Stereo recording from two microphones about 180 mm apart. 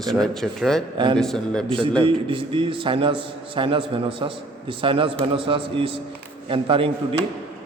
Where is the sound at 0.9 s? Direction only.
25° right (ahead or behind).